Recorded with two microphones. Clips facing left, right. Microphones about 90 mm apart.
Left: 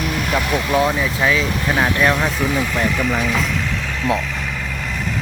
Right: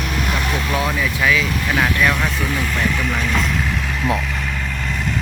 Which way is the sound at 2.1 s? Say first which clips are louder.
Left 3 dB; 15° left (ahead or behind).